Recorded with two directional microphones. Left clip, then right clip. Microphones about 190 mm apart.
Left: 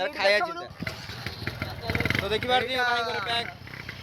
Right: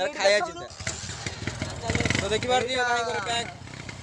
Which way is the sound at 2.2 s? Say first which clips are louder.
Even; 10° left (ahead or behind).